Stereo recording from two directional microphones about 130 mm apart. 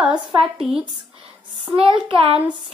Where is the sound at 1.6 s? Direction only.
40° right (ahead or behind).